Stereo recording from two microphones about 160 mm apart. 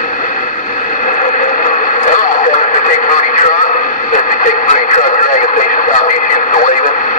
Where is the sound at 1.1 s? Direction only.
50° left (ahead or behind).